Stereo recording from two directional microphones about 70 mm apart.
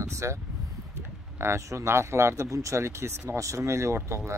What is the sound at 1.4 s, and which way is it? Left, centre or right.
Speech, right.